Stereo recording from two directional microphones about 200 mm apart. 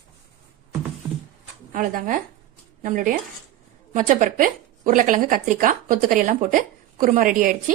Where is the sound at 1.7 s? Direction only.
45° right (ahead or behind).